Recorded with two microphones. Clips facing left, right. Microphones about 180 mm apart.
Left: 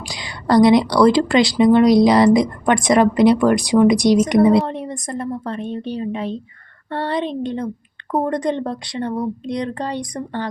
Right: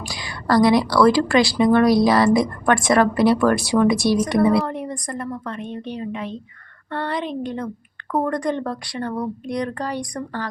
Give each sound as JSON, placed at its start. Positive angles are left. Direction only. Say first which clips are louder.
{"t": 0.0, "sound": "a woman's voice", "louder": "left 1 dB", "side_deg": 20}